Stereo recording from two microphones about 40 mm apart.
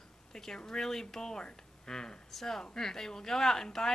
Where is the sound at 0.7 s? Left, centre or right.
Centre.